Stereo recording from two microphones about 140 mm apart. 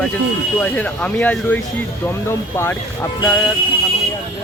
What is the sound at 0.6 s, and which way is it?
Speech, 10° left (ahead or behind).